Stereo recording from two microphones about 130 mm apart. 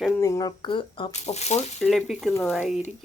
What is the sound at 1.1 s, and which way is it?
Speech, 55° left (ahead or behind).